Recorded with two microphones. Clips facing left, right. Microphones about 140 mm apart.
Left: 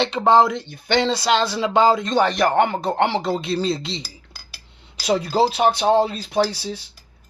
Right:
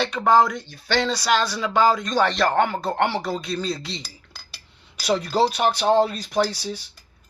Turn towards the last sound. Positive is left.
turn(degrees=25)  # may be behind; listen again after turning